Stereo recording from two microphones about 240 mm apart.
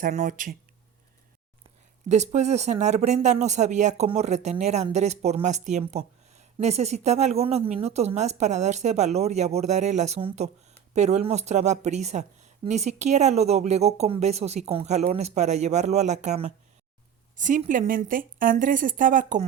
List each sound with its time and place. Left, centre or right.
0.0 s speech: right
2.0 s speech: right